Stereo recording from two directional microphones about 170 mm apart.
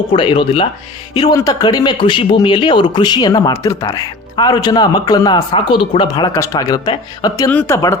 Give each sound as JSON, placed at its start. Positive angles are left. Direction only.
{"t": 0.1, "sound": "speech", "side_deg": 30}